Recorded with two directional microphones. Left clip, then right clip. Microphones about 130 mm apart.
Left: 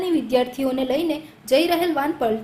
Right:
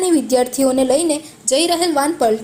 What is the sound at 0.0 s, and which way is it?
A woman's voice, 35° right (ahead or behind).